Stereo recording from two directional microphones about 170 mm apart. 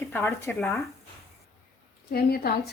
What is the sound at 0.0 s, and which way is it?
Speech, 15° left (ahead or behind).